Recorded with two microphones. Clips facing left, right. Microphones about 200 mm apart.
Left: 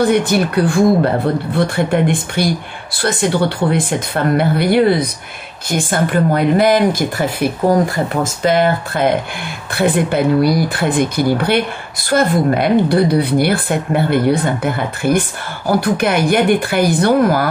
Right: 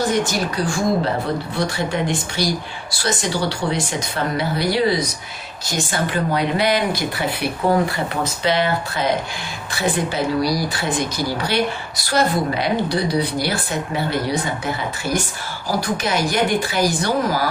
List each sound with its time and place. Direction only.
0.0 s speech: 60° left (ahead or behind)